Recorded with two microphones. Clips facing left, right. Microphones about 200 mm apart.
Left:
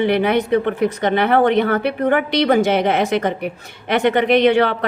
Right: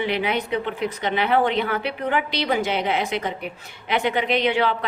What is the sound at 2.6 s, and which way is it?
A woman's voice, 65° left (ahead or behind).